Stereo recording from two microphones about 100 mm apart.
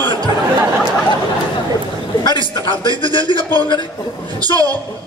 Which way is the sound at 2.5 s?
50° left (ahead or behind).